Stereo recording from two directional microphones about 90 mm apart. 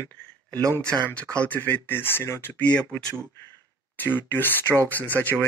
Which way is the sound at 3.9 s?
20° left (ahead or behind).